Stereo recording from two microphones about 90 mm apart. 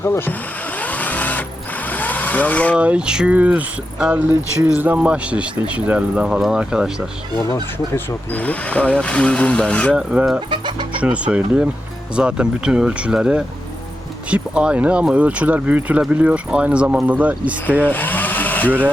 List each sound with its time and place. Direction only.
0.0 s speech: 25° left (ahead or behind)
0.8 s vehicle: 15° left (ahead or behind)
2.7 s speech: 10° right (ahead or behind)
8.3 s speech: 15° left (ahead or behind)
9.9 s speech: 10° right (ahead or behind)
10.5 s chicken: 60° right (ahead or behind)
11.0 s speech: 15° right (ahead or behind)
17.8 s vehicle: 20° left (ahead or behind)